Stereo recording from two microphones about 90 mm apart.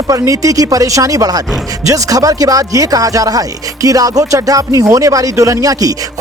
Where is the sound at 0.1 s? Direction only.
40° right (ahead or behind).